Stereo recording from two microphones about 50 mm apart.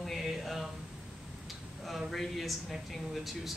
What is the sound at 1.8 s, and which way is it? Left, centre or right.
A man's voice, centre.